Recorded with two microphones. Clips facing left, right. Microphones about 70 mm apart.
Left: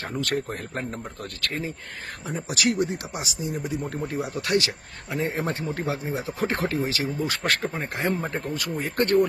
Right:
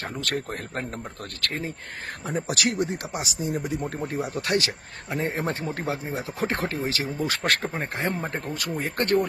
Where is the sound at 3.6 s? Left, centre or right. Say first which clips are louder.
Even; centre.